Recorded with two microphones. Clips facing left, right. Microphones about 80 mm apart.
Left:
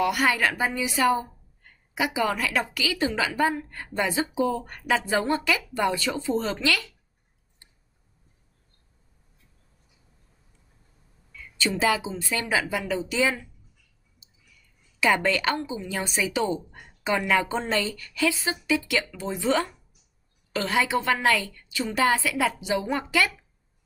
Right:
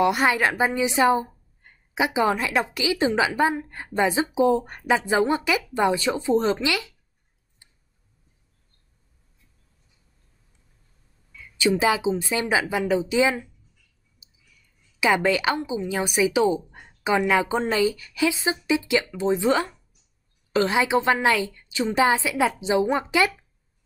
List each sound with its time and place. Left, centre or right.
0.0 s a woman's voice: right
11.3 s a woman's voice: centre
15.0 s a woman's voice: centre